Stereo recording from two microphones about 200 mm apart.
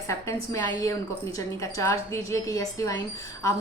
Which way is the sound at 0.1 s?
15° left (ahead or behind).